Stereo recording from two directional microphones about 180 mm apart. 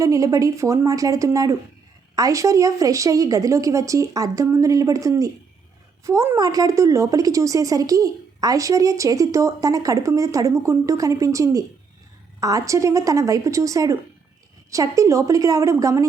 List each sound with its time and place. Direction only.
0.0 s a woman's voice: 20° right (ahead or behind)